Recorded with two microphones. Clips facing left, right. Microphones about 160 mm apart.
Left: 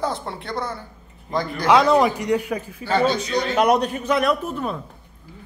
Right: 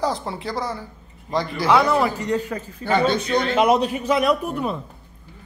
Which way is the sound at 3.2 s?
55° right (ahead or behind).